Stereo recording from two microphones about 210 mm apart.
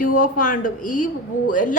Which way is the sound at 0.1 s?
40° left (ahead or behind).